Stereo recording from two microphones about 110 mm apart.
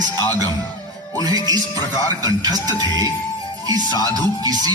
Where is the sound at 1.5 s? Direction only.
35° right (ahead or behind).